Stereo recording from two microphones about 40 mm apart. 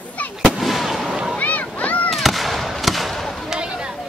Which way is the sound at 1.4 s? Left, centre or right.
Left.